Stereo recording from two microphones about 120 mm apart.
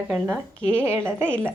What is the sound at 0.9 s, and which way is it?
Speech, 20° right (ahead or behind).